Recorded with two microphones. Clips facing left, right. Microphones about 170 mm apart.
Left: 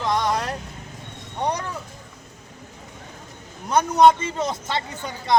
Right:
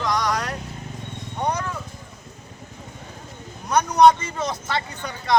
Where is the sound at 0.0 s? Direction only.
25° left (ahead or behind).